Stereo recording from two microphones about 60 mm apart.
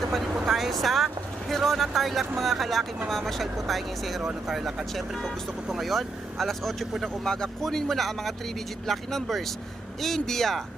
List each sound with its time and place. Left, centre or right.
0.4 s speech: centre